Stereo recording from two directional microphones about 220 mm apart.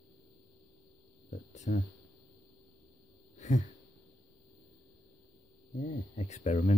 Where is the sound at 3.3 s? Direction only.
30° left (ahead or behind).